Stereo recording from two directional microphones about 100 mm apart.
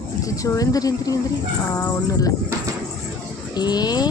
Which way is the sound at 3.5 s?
45° left (ahead or behind).